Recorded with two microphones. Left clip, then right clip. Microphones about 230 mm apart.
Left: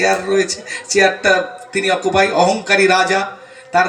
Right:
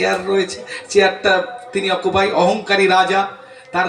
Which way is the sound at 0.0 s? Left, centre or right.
Left.